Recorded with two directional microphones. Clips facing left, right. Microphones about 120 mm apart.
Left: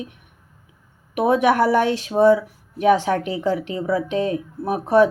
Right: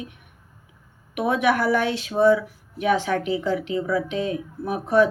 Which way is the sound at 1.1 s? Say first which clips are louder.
Left 4 dB; 35° left (ahead or behind).